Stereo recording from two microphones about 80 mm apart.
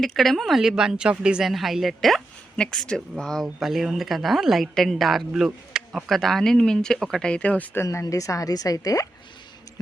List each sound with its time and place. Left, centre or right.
0.0 s speech: centre
5.7 s a sound: centre
6.1 s speech: centre
7.9 s speech: left